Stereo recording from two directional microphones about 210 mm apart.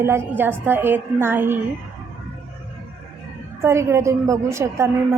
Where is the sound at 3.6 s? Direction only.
10° right (ahead or behind).